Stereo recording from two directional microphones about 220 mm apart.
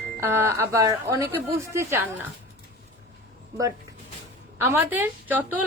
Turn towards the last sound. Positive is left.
turn(degrees=-10)  # may be behind; listen again after turning